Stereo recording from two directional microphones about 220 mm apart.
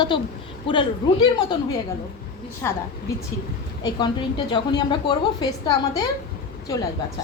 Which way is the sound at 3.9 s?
20° left (ahead or behind).